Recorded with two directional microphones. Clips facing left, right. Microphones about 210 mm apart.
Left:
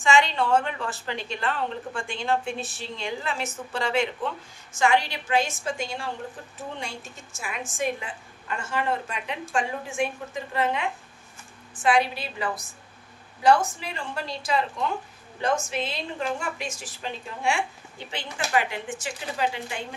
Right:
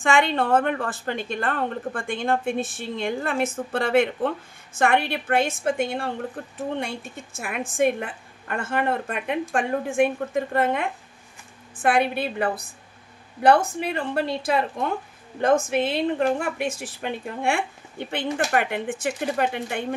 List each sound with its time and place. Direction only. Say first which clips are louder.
0.0 s a woman's voice: right 1 dB; 55° right (ahead or behind)